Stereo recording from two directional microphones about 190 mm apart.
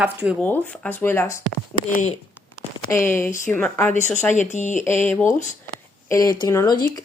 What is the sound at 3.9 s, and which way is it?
Speech, 40° left (ahead or behind).